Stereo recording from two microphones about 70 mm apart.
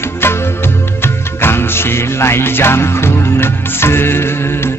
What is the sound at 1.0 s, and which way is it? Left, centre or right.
Music, left.